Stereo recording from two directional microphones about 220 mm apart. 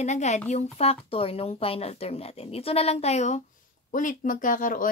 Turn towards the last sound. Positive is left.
turn(degrees=35)  # may be behind; listen again after turning